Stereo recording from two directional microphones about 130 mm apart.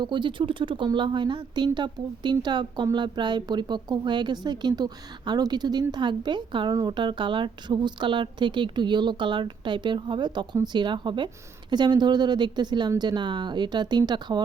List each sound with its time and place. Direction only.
0.0 s a woman's voice: 40° right (ahead or behind)